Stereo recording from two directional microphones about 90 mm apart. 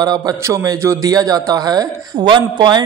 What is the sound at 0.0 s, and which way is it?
Speech, 50° right (ahead or behind).